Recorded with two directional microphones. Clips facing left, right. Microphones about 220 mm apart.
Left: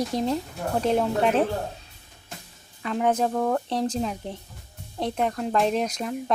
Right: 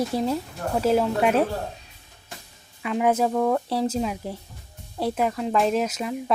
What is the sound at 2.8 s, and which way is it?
Speech, 10° right (ahead or behind).